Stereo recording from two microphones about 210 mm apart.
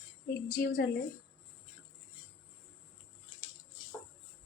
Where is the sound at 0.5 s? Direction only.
45° left (ahead or behind).